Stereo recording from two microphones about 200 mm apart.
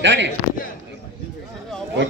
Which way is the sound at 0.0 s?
65° right (ahead or behind).